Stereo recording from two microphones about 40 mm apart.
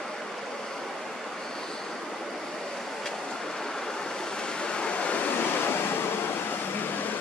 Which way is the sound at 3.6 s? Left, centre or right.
Centre.